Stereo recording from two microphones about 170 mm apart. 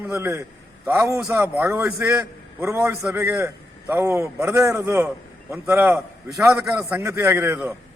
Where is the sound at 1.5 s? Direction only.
5° right (ahead or behind).